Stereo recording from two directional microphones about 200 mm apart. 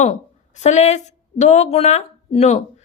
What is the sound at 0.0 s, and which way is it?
A woman's voice, 35° left (ahead or behind).